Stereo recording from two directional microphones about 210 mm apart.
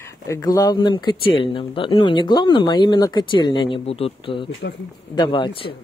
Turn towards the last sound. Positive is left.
turn(degrees=25)  # may be behind; listen again after turning